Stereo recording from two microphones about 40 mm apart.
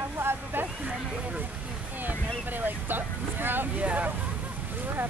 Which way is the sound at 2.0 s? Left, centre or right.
Right.